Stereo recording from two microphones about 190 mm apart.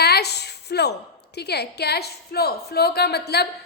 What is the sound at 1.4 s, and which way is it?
A woman's voice, 60° left (ahead or behind).